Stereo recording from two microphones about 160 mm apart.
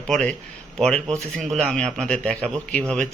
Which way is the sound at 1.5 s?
Centre (ahead or behind).